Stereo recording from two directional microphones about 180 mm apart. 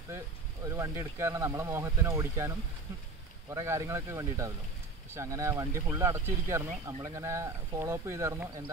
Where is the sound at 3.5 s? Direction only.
15° right (ahead or behind).